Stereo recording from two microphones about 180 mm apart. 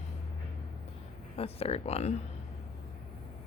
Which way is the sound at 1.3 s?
35° left (ahead or behind).